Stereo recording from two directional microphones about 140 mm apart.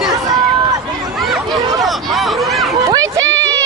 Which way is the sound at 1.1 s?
Centre (ahead or behind).